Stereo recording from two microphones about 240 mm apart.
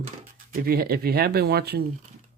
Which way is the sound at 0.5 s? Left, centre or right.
Right.